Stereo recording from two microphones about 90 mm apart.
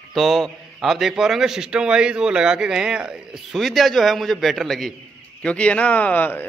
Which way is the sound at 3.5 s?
Centre (ahead or behind).